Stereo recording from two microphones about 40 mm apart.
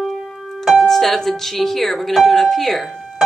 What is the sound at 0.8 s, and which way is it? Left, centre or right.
Speech, centre.